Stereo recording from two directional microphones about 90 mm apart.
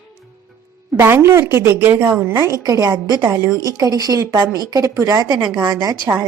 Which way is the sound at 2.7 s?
45° right (ahead or behind).